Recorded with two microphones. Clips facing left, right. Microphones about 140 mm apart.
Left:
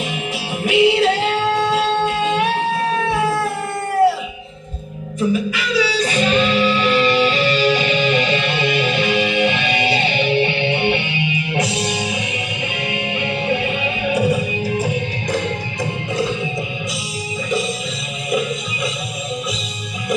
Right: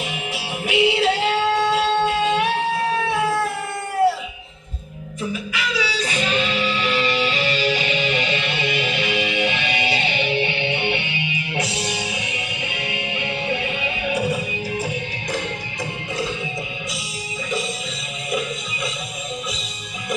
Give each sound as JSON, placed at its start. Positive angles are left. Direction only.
{"t": 0.1, "sound": "music", "side_deg": -10}
{"t": 2.9, "sound": "a sound", "side_deg": 50}
{"t": 5.5, "sound": "music", "side_deg": 35}